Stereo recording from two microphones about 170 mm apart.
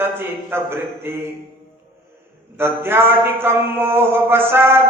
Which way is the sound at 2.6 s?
15° right (ahead or behind).